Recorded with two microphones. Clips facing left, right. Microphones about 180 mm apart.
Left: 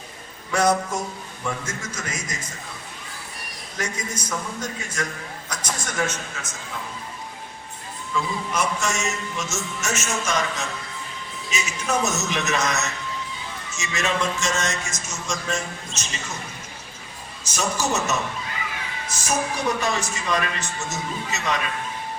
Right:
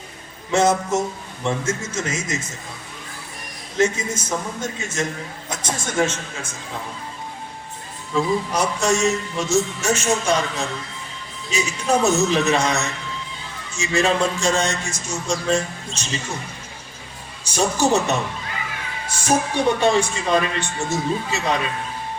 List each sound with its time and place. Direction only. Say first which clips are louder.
0.5 s a man's voice: right 3 dB; 25° right (ahead or behind)
3.8 s a man's voice: right 9 dB; 25° right (ahead or behind)
8.1 s a man's voice: right 6 dB; 35° right (ahead or behind)
17.4 s a man's voice: right 6 dB; 30° right (ahead or behind)